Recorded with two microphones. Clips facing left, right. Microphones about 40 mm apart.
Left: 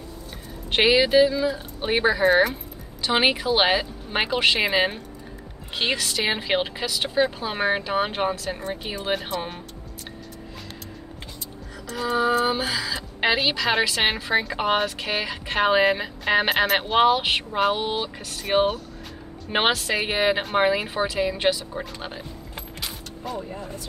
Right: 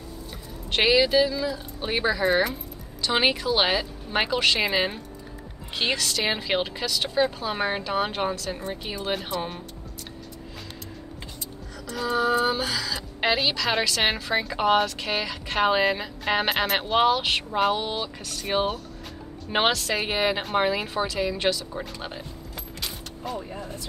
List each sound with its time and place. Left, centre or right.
0.7 s speech: centre
11.9 s speech: centre
17.5 s a sound: centre
17.9 s speech: centre
22.8 s creak: centre